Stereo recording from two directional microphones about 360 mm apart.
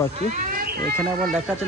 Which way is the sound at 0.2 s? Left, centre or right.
Right.